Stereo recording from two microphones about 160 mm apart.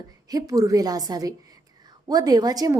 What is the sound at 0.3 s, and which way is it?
A woman's voice, 20° right (ahead or behind).